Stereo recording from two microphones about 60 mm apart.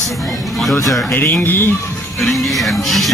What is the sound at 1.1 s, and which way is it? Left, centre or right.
Speech, left.